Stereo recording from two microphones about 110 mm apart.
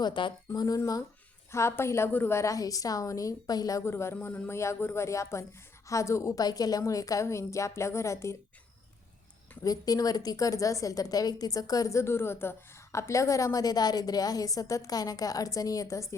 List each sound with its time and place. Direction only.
0.0 s speech: 45° left (ahead or behind)
0.6 s a woman's voice: 35° left (ahead or behind)
9.6 s a woman's voice: 35° left (ahead or behind)